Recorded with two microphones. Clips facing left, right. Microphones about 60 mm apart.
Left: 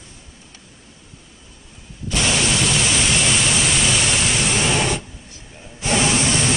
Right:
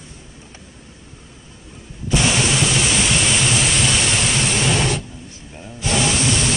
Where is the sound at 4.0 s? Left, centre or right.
Centre.